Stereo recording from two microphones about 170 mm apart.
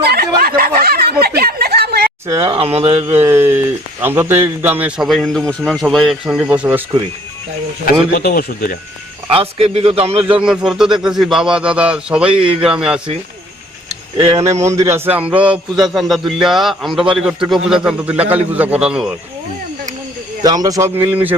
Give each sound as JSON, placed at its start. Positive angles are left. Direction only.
{"t": 0.0, "sound": "snicker", "side_deg": -65}
{"t": 2.2, "sound": "speech", "side_deg": -20}
{"t": 2.6, "sound": "a man's voice", "side_deg": -35}
{"t": 3.2, "sound": "speech", "side_deg": -15}
{"t": 8.1, "sound": "speech", "side_deg": 60}
{"t": 9.3, "sound": "a man's voice", "side_deg": -35}
{"t": 10.4, "sound": "speech", "side_deg": -5}
{"t": 14.6, "sound": "speech", "side_deg": -15}
{"t": 20.4, "sound": "speech", "side_deg": -20}